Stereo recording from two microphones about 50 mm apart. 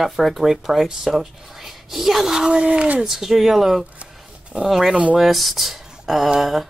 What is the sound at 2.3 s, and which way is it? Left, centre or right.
Speech, centre.